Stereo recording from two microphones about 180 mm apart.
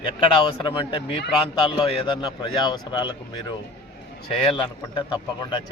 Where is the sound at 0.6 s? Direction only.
30° left (ahead or behind).